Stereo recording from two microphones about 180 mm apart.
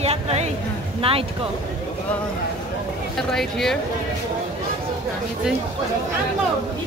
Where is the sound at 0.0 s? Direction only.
35° right (ahead or behind).